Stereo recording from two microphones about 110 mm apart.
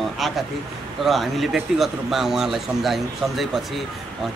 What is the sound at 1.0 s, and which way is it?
Speech, centre (ahead or behind).